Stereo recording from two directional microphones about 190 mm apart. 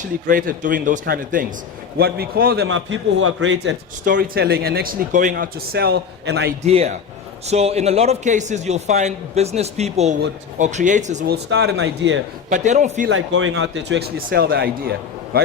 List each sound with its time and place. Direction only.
0.3 s a man's voice: 45° right (ahead or behind)
2.6 s a man's voice: 90° right
4.0 s a man's voice: 50° right (ahead or behind)
6.7 s a man's voice: 35° right (ahead or behind)
11.3 s speech: 65° right (ahead or behind); by 12.2 s 85° right
12.5 s a man's voice: 40° right (ahead or behind)
13.1 s a man's voice: 90° right; by 14.0 s 70° right (ahead or behind)
14.5 s a man's voice: 55° right (ahead or behind)